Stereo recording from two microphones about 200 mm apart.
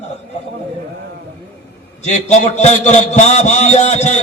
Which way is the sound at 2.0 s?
35° left (ahead or behind).